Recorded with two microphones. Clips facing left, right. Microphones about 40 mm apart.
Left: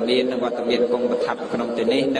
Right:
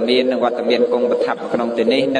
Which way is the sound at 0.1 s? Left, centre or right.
Right.